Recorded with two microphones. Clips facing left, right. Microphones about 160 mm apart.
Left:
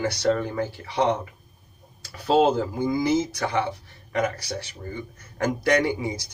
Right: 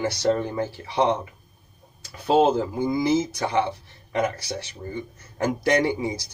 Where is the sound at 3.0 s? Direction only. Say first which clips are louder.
Right 2 dB; 25° right (ahead or behind).